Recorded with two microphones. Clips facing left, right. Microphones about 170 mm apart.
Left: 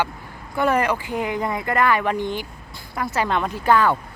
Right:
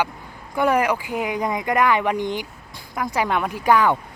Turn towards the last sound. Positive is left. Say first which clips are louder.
# even
turn(degrees=-15)  # may be behind; listen again after turning